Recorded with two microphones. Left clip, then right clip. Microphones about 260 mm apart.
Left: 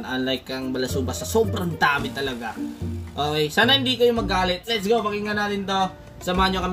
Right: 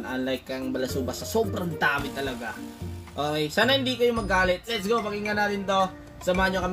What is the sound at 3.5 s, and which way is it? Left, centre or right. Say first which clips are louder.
Speech: left 4 dB; left.